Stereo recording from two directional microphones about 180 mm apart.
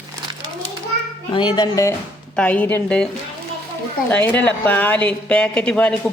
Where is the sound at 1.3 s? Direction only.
25° left (ahead or behind).